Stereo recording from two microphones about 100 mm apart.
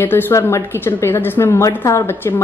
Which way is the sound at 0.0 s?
20° left (ahead or behind).